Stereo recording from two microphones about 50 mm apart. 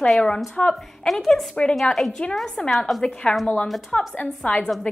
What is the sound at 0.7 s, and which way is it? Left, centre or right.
Speech, centre.